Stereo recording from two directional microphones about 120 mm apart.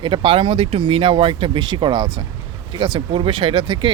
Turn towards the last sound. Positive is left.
turn(degrees=-45)  # may be behind; listen again after turning